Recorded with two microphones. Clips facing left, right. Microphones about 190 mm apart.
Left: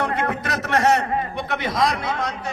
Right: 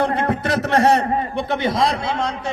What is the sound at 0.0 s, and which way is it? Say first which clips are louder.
A man's voice: right 4 dB; 30° right (ahead or behind).